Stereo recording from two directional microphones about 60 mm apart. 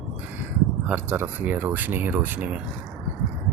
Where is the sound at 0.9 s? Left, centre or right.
Right.